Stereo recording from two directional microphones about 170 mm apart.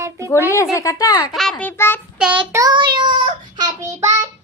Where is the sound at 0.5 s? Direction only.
15° left (ahead or behind).